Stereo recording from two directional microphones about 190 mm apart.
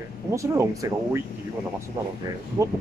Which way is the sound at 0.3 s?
15° right (ahead or behind).